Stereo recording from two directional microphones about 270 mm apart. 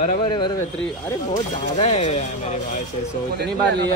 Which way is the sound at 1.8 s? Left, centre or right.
Left.